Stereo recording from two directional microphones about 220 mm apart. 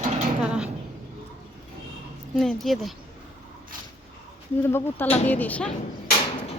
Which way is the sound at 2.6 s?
Centre (ahead or behind).